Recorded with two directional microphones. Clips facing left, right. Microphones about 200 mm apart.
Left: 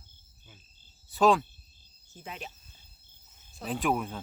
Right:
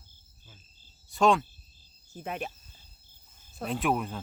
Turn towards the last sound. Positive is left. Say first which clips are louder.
# right 1 dB
turn(degrees=0)  # may be behind; listen again after turning